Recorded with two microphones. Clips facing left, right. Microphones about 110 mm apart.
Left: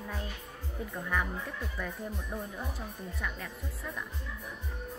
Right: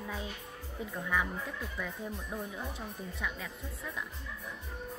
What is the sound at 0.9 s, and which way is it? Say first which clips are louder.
Speech: even; centre (ahead or behind).